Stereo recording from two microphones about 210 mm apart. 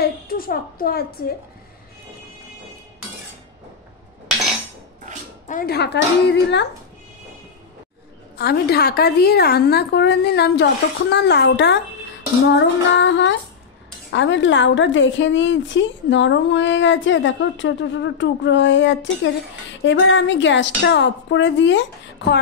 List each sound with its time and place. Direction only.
0.0 s a woman's voice: 45° left (ahead or behind)
5.5 s a woman's voice: 45° left (ahead or behind)
6.3 s a woman's voice: 55° left (ahead or behind)
8.4 s a woman's voice: 50° left (ahead or behind)